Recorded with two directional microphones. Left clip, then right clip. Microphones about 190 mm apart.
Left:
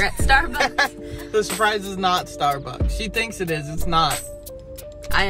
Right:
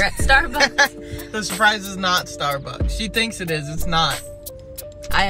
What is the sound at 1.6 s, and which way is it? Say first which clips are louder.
Music: right 2 dB; 25° left (ahead or behind).